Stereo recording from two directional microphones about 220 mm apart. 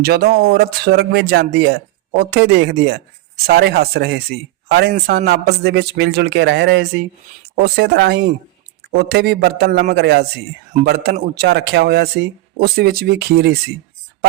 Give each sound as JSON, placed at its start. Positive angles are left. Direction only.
{"t": 0.0, "sound": "speech", "side_deg": -45}